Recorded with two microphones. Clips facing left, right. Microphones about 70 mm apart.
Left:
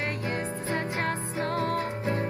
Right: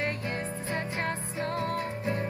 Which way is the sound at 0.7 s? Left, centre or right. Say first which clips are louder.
Left 3 dB; centre.